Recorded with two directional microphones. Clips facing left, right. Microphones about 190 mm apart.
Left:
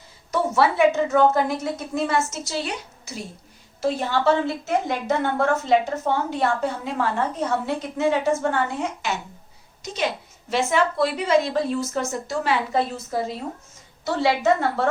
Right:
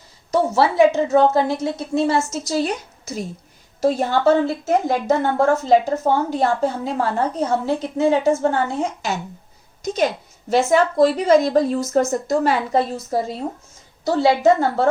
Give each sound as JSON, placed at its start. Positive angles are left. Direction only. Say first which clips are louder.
{"t": 0.3, "sound": "a woman's voice", "louder": "right 3 dB", "side_deg": -30}
{"t": 2.5, "sound": "a woman's voice", "louder": "right 7 dB", "side_deg": -40}